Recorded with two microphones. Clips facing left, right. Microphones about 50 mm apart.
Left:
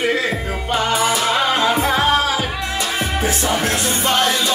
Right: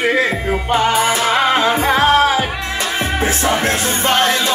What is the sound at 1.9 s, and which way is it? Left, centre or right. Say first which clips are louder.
Music: right 4 dB; right.